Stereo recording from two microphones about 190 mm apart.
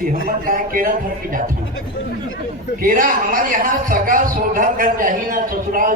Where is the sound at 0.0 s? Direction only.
45° right (ahead or behind).